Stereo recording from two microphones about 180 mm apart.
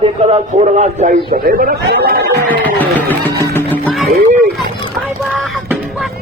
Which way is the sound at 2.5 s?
10° left (ahead or behind).